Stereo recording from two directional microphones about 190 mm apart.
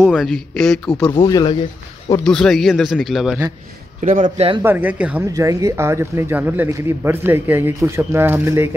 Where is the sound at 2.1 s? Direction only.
5° left (ahead or behind).